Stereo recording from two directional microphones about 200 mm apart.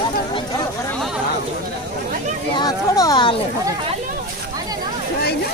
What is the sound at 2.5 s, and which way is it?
Speech, 20° left (ahead or behind).